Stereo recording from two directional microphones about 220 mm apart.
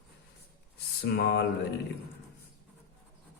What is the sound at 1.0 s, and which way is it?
Speech, 45° left (ahead or behind).